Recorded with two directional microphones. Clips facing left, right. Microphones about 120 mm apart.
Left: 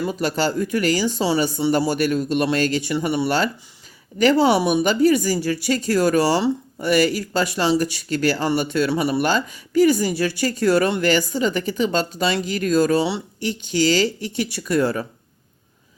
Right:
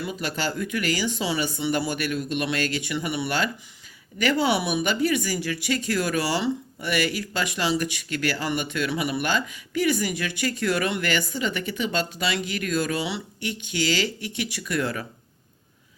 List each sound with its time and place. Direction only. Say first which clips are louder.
0.0 s speech: left 7 dB; 40° left (ahead or behind)